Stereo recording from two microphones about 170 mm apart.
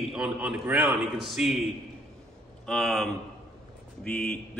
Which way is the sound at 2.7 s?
Centre (ahead or behind).